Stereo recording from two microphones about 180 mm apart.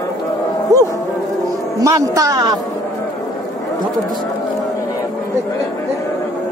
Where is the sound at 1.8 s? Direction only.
20° right (ahead or behind).